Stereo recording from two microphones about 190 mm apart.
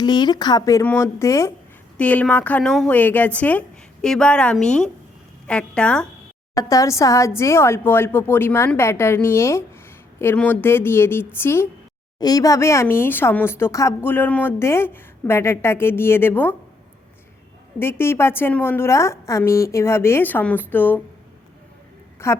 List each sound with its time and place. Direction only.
0.0 s a woman's voice: 20° left (ahead or behind); by 6.1 s 5° left (ahead or behind)
6.5 s speech: 15° left (ahead or behind)
17.7 s speech: 10° left (ahead or behind)
22.2 s a woman's voice: 15° left (ahead or behind)